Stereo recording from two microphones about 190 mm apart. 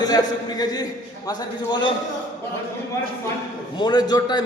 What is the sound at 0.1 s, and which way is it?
A man's voice, 20° left (ahead or behind).